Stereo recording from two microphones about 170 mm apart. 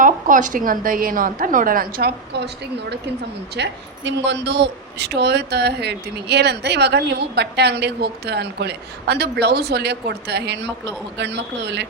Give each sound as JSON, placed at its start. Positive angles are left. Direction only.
{"t": 0.0, "sound": "a woman's voice", "side_deg": -50}
{"t": 3.5, "sound": "a woman's voice", "side_deg": -90}